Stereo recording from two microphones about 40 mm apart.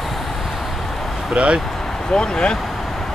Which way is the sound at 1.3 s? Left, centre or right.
Right.